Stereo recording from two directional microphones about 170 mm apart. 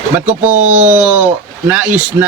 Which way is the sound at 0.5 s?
45° right (ahead or behind).